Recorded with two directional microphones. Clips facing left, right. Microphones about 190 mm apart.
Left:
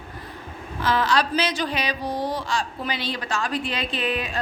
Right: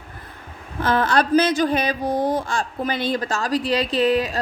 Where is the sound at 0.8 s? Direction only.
50° right (ahead or behind).